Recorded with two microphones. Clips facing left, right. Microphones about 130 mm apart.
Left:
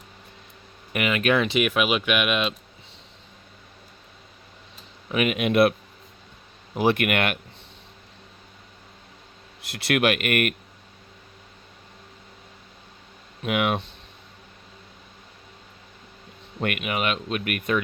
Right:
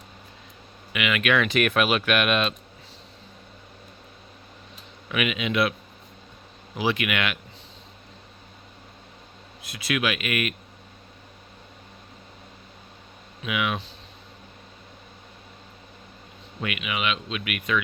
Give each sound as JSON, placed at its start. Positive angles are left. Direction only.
{"t": 0.9, "sound": "speech", "side_deg": 35}
{"t": 1.5, "sound": "speech", "side_deg": 10}
{"t": 5.0, "sound": "speech", "side_deg": 35}
{"t": 5.3, "sound": "speech", "side_deg": 55}
{"t": 6.7, "sound": "speech", "side_deg": 55}
{"t": 9.8, "sound": "speech", "side_deg": 65}
{"t": 13.4, "sound": "speech", "side_deg": 50}
{"t": 16.6, "sound": "speech", "side_deg": 50}